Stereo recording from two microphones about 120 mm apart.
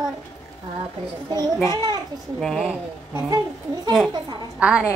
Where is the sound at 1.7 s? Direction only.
35° right (ahead or behind).